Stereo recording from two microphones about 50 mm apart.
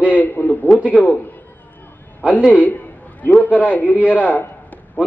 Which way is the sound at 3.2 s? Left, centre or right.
Left.